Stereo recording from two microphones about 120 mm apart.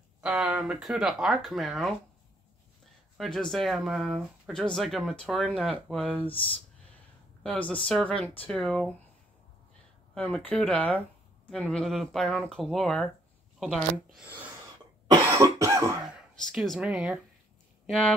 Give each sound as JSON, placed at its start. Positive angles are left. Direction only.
{"t": 0.2, "sound": "speech", "side_deg": -10}
{"t": 3.2, "sound": "speech", "side_deg": 5}
{"t": 7.4, "sound": "speech", "side_deg": 10}
{"t": 10.1, "sound": "speech", "side_deg": 10}
{"t": 15.1, "sound": "cough", "side_deg": -25}
{"t": 16.5, "sound": "speech", "side_deg": 0}
{"t": 17.8, "sound": "speech", "side_deg": 5}